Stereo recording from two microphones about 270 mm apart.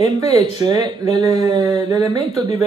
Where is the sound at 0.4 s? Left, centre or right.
Centre.